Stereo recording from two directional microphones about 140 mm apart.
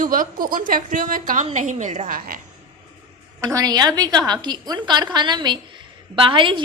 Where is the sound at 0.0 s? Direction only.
80° right.